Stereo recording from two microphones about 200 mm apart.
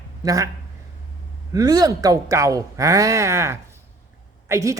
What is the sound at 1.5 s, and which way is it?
A man's voice, 20° right (ahead or behind).